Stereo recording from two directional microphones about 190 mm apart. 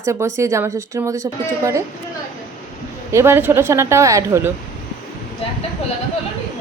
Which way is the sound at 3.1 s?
15° right (ahead or behind).